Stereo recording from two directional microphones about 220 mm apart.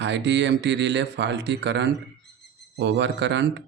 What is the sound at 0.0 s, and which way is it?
Speech, 55° right (ahead or behind).